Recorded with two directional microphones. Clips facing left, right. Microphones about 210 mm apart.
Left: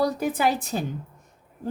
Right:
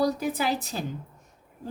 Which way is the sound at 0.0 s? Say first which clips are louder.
Left 2 dB; 55° left (ahead or behind).